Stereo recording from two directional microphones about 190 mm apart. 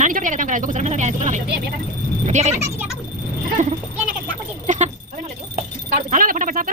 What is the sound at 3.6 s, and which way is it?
Speech, 40° right (ahead or behind).